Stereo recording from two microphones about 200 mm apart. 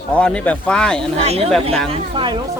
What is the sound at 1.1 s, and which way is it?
Speech, 30° right (ahead or behind).